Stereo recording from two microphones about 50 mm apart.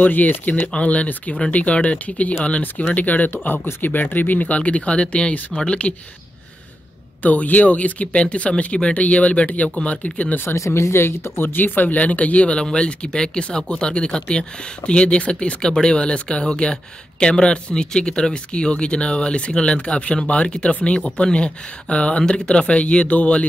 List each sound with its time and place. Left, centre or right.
0.0 s speech: left
0.7 s speech: left
7.2 s speech: left
10.5 s speech: left